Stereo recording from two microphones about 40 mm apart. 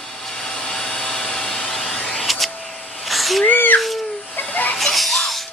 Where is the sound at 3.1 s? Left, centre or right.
Centre.